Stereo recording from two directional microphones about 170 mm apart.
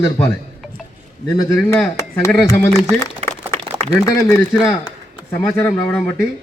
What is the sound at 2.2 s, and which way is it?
Speech, 15° left (ahead or behind).